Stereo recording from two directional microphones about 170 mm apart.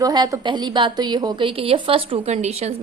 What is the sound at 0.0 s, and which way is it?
A woman's voice, 20° right (ahead or behind).